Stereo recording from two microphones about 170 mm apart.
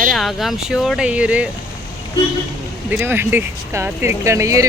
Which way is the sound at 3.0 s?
15° right (ahead or behind).